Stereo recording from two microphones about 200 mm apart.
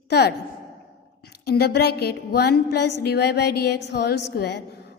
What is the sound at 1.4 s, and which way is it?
Music, 55° left (ahead or behind).